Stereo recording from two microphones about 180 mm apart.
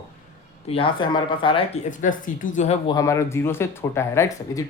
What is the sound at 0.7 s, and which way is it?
Speech, 30° left (ahead or behind).